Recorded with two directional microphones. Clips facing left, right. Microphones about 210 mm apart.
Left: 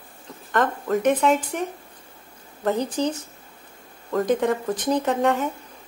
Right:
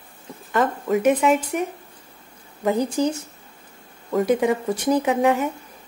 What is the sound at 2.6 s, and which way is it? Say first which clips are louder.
A woman's voice: right 2 dB; 10° right (ahead or behind).